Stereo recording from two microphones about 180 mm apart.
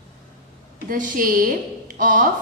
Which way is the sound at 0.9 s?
50° right (ahead or behind).